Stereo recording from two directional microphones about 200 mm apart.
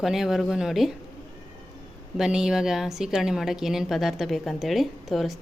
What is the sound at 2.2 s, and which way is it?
A woman's voice, 5° right (ahead or behind).